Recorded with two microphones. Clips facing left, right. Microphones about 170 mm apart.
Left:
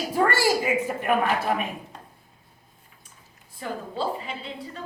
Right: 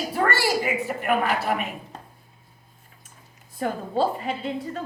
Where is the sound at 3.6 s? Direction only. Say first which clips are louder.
Right 6 dB; 50° right (ahead or behind).